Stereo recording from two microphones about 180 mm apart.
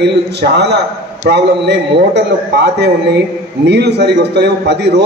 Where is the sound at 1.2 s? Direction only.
70° right (ahead or behind).